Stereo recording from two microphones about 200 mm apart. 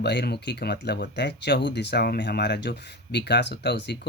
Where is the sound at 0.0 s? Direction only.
55° left (ahead or behind).